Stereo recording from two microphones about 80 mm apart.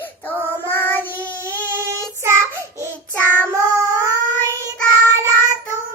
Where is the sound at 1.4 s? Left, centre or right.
Right.